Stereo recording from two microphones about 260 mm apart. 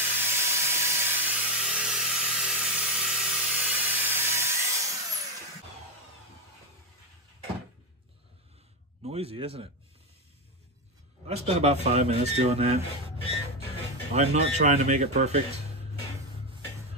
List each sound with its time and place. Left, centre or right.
0.2 s a sound: centre
9.0 s speech: right
11.2 s speech: right
14.1 s speech: right